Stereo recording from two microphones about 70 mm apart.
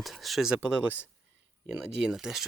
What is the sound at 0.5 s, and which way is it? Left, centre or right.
Speech, right.